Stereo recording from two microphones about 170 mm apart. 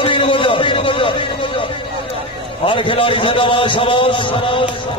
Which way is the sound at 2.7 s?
30° left (ahead or behind).